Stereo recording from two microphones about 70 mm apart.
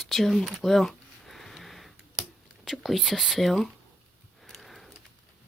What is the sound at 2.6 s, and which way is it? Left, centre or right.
Speech, centre.